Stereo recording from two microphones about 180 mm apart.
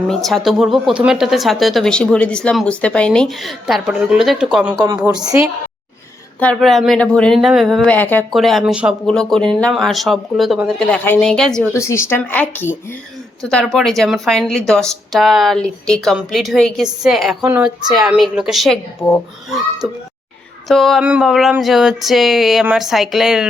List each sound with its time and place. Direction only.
0.1 s speech: centre (ahead or behind)
6.4 s speech: 5° left (ahead or behind)
11.7 s speech: 15° left (ahead or behind); by 23.5 s 5° right (ahead or behind)